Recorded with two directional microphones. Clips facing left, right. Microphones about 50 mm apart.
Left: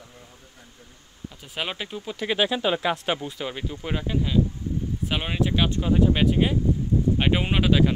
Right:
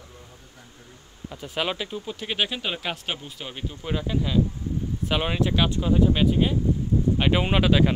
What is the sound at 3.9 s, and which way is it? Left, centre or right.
Speech, left.